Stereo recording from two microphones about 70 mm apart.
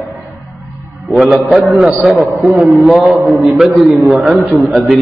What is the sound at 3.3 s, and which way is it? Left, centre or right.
A man's voice, centre.